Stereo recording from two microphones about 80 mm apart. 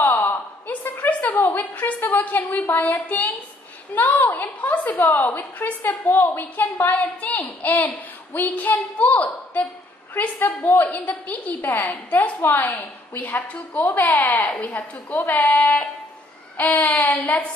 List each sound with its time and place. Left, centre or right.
0.0 s a sound: left
3.1 s a woman's voice: left
15.4 s a woman's voice: left